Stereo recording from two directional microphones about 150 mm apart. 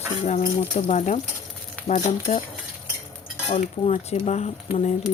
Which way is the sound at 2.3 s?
50° left (ahead or behind).